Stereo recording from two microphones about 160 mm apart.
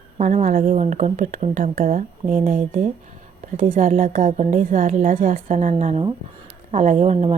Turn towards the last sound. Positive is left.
turn(degrees=-45)  # may be behind; listen again after turning